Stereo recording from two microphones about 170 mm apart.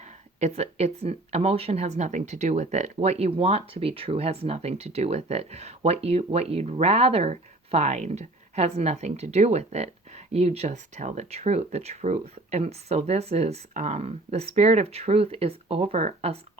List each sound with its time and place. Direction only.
0.0 s speech: 40° right (ahead or behind)